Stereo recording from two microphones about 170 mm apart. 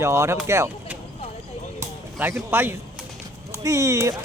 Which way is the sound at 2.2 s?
15° right (ahead or behind).